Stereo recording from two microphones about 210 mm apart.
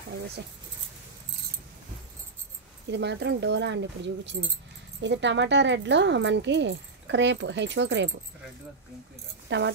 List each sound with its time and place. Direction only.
2.9 s speech: 55° right (ahead or behind)
9.5 s speech: 60° right (ahead or behind)